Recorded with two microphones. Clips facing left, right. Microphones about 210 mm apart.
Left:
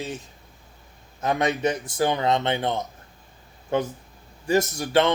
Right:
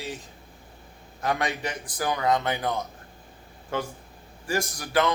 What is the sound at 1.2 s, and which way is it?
Speech, 20° left (ahead or behind).